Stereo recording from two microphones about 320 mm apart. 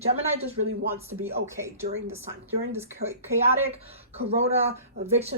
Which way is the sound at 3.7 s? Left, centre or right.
Centre.